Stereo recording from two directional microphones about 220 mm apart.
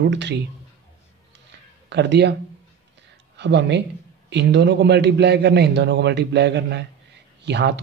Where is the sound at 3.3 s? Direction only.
50° right (ahead or behind).